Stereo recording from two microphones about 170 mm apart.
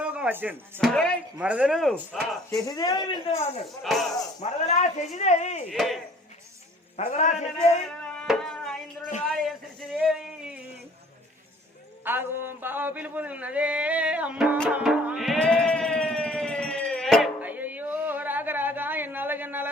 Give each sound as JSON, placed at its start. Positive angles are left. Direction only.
{"t": 0.0, "sound": "music", "side_deg": -10}
{"t": 0.8, "sound": "speech", "side_deg": 5}
{"t": 1.4, "sound": "speech", "side_deg": -5}
{"t": 2.6, "sound": "speech", "side_deg": 20}
{"t": 4.4, "sound": "speech", "side_deg": 40}
{"t": 5.7, "sound": "speech", "side_deg": 0}
{"t": 6.9, "sound": "speech", "side_deg": 40}
{"t": 8.1, "sound": "chopping", "side_deg": 5}
{"t": 9.2, "sound": "a sound", "side_deg": 0}
{"t": 12.0, "sound": "a sound", "side_deg": -10}
{"t": 14.7, "sound": "music", "side_deg": -10}
{"t": 17.4, "sound": "a sound", "side_deg": -10}